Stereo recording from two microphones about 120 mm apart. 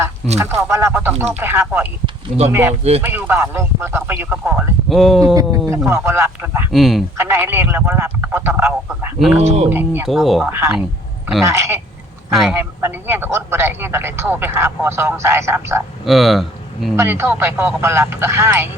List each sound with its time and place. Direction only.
0.3 s speech: 20° right (ahead or behind)
4.9 s speech: centre (ahead or behind)
5.2 s speech: 30° right (ahead or behind)
6.7 s speech: centre (ahead or behind)
7.2 s speech: 20° right (ahead or behind)
9.1 s speech: centre (ahead or behind)
9.4 s speech: 65° right (ahead or behind)
9.6 s speech: 15° right (ahead or behind)
10.1 s speech: centre (ahead or behind)
10.5 s speech: 20° right (ahead or behind)
12.3 s speech: centre (ahead or behind)
12.5 s speech: 20° right (ahead or behind)
16.0 s speech: centre (ahead or behind)
17.0 s speech: 20° right (ahead or behind)